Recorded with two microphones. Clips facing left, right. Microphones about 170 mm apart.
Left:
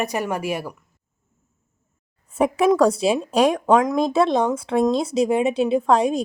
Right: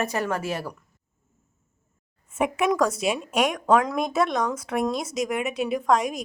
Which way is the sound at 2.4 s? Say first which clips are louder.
Left 6 dB; 35° left (ahead or behind).